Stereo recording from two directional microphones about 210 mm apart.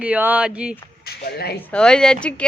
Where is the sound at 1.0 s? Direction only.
50° left (ahead or behind).